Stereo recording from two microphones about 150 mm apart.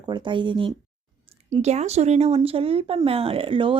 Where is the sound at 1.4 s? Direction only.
45° right (ahead or behind).